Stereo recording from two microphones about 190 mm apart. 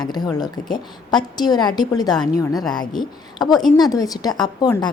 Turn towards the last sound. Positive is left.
turn(degrees=20)  # may be behind; listen again after turning